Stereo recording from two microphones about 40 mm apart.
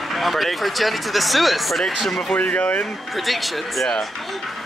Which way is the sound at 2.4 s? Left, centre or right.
Left.